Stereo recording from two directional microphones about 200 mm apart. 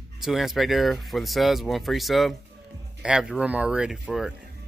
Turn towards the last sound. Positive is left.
turn(degrees=0)  # may be behind; listen again after turning